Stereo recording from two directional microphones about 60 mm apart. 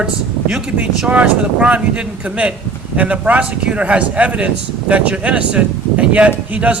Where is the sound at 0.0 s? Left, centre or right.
Right.